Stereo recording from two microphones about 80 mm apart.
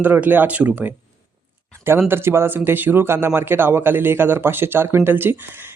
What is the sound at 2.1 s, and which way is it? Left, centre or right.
Speech, right.